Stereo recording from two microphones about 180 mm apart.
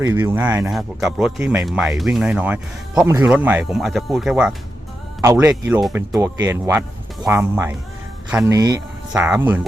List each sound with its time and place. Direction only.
0.0 s speech: 20° right (ahead or behind)
0.3 s speech: 5° right (ahead or behind)
1.4 s speech: 15° right (ahead or behind)
1.6 s speech: centre (ahead or behind)
5.2 s speech: 15° right (ahead or behind)
9.1 s speech: 5° right (ahead or behind)